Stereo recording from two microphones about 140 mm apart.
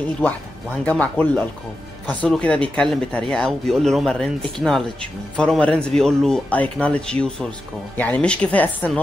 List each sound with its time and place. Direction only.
0.8 s speech: 10° left (ahead or behind)